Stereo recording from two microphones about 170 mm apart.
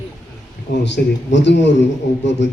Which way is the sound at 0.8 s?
90° left.